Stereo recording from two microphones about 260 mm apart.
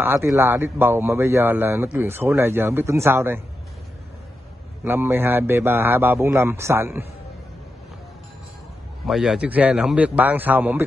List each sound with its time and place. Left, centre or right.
0.0 s speech: centre
4.8 s speech: centre
9.0 s a man's voice: centre